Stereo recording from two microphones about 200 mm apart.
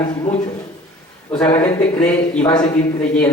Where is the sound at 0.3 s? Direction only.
30° left (ahead or behind).